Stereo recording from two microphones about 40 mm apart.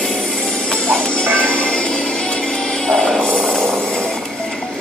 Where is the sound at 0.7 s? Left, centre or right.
Left.